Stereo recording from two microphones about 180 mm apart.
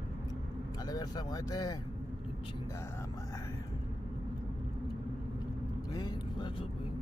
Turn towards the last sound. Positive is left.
turn(degrees=25)  # may be behind; listen again after turning